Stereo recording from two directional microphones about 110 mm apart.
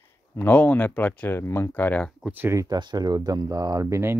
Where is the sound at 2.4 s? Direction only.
30° right (ahead or behind).